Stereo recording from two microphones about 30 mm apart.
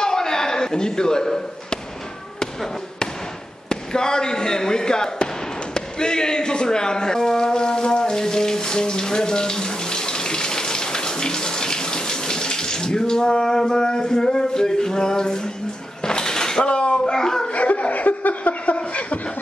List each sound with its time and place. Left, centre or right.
0.0 s a sound: centre
3.6 s speech: left
5.8 s a sound: left
16.6 s speech: left
17.0 s speech: centre
17.5 s chuckle: left